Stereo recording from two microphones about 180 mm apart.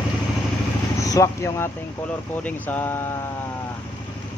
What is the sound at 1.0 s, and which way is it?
Speech, 20° left (ahead or behind).